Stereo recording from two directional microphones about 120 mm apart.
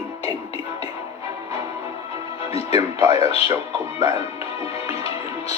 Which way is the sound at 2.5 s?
55° left (ahead or behind).